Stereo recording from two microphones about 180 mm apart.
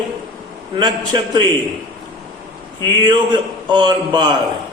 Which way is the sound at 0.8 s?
25° right (ahead or behind).